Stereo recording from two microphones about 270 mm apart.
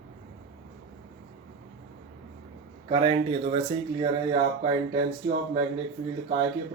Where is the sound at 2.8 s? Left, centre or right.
Right.